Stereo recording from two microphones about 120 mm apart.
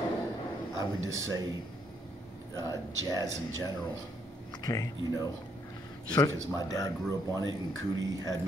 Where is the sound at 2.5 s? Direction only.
25° right (ahead or behind).